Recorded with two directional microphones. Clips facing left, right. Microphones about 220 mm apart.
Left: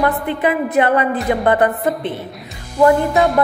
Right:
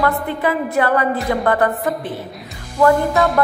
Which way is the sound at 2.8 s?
15° left (ahead or behind).